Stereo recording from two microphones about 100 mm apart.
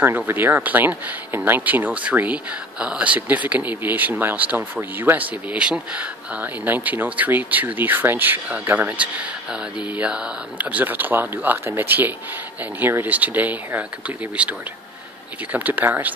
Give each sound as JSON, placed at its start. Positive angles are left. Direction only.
{"t": 0.3, "sound": "speech", "side_deg": -20}
{"t": 15.5, "sound": "speech", "side_deg": -15}